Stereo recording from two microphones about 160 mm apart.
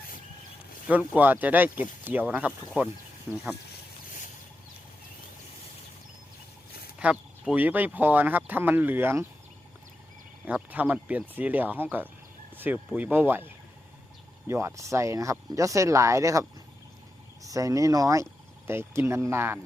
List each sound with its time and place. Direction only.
0.9 s speech: 10° right (ahead or behind)
7.0 s speech: 5° right (ahead or behind)
10.4 s speech: 10° right (ahead or behind)
12.5 s fowl: 10° right (ahead or behind)
13.0 s speech: 10° right (ahead or behind)
14.4 s speech: 15° right (ahead or behind)